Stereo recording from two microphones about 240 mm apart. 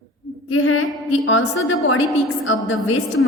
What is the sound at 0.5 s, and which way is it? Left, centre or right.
A woman's voice, left.